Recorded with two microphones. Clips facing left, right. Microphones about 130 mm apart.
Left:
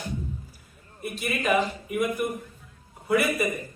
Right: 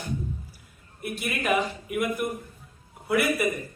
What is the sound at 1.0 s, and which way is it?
A man's voice, 5° right (ahead or behind).